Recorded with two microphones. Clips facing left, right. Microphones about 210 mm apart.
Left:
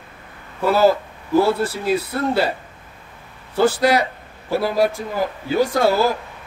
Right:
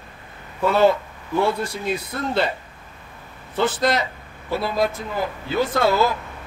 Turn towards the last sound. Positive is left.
turn(degrees=40)  # may be behind; listen again after turning